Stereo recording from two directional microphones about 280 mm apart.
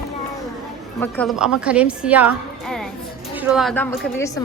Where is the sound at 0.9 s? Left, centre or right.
Centre.